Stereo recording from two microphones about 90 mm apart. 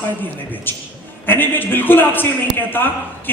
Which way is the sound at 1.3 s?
20° left (ahead or behind).